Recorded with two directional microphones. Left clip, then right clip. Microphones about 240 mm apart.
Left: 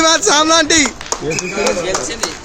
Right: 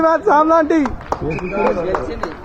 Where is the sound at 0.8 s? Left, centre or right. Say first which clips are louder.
Left 3 dB; right.